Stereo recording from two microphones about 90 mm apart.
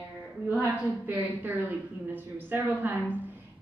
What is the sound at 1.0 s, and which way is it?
Speech, 20° right (ahead or behind).